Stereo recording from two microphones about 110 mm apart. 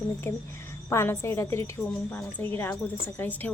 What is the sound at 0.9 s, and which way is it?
A woman's voice, 25° left (ahead or behind).